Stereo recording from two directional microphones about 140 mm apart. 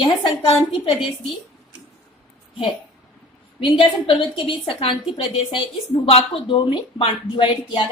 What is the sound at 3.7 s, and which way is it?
A woman's voice, 40° left (ahead or behind).